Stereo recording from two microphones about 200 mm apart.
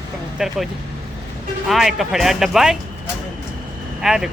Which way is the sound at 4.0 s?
Centre (ahead or behind).